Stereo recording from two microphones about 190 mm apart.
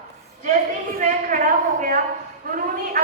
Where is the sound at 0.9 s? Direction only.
45° right (ahead or behind).